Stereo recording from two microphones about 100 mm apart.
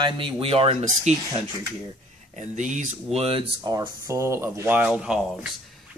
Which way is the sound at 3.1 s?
80° right.